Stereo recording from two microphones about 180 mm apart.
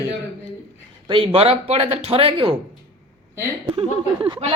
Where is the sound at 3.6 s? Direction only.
25° right (ahead or behind).